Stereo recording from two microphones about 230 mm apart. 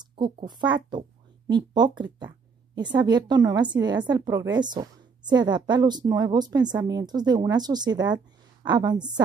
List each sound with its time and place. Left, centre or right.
0.0 s a woman's voice: centre